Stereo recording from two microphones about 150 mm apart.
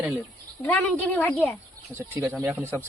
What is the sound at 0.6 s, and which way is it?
Speech, 10° left (ahead or behind).